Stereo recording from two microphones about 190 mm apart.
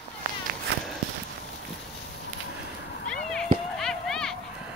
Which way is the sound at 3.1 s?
5° left (ahead or behind).